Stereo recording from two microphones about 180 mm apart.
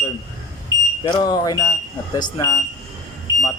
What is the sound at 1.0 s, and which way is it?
Speech, 25° left (ahead or behind).